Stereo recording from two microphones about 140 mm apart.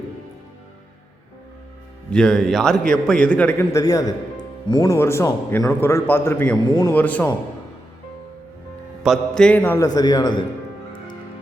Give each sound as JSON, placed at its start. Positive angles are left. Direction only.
{"t": 2.0, "sound": "a man's voice", "side_deg": 5}
{"t": 3.7, "sound": "a man's voice", "side_deg": 25}
{"t": 6.9, "sound": "mantra", "side_deg": 10}
{"t": 9.0, "sound": "mantra", "side_deg": 5}
{"t": 9.7, "sound": "a man's voice", "side_deg": 25}